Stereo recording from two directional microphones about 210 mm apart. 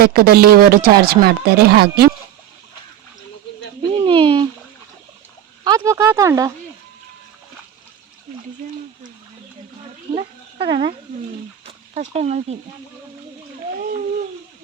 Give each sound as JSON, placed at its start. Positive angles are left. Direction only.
{"t": 0.0, "sound": "speech", "side_deg": -45}
{"t": 3.9, "sound": "speech", "side_deg": -25}
{"t": 5.6, "sound": "speech", "side_deg": -15}
{"t": 10.2, "sound": "a sound", "side_deg": -25}